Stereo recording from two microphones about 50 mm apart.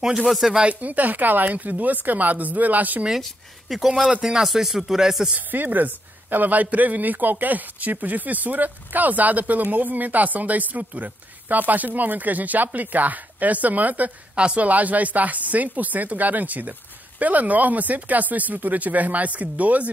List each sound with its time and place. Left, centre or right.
0.0 s speech: centre
0.7 s speech: right
3.6 s speech: centre
5.3 s speech: right